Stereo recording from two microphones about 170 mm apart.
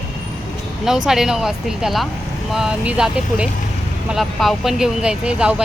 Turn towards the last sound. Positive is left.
turn(degrees=-5)  # may be behind; listen again after turning